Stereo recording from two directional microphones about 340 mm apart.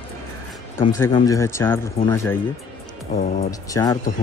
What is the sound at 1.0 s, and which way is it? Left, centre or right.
Speech, centre.